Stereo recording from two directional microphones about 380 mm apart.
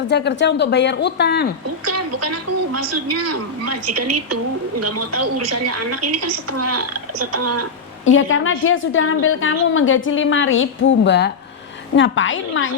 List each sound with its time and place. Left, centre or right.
0.1 s a woman's voice: left
1.9 s a woman's voice: right
8.0 s a woman's voice: left